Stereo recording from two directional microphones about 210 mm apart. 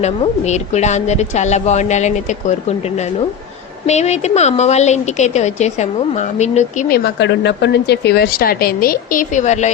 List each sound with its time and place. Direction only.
0.0 s a woman's voice: 30° left (ahead or behind)
3.8 s a woman's voice: 30° left (ahead or behind)
6.9 s speech: 55° left (ahead or behind); by 9.6 s 35° left (ahead or behind)